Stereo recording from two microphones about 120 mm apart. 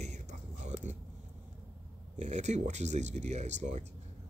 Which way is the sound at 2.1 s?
75° right (ahead or behind).